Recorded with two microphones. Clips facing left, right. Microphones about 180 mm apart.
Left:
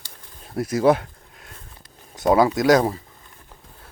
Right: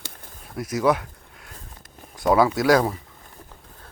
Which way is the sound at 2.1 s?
20° left (ahead or behind).